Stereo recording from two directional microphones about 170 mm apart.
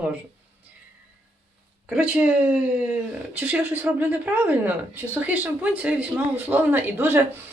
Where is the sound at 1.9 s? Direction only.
10° right (ahead or behind).